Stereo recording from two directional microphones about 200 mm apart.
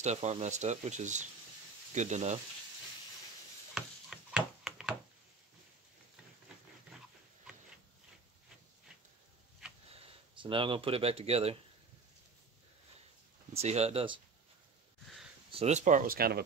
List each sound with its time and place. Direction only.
0.0 s speech: 35° right (ahead or behind)
3.7 s a sound: 5° right (ahead or behind)
9.8 s speech: 25° right (ahead or behind)
13.5 s speech: 30° right (ahead or behind)
15.5 s speech: 35° right (ahead or behind); by 16.4 s 50° right (ahead or behind)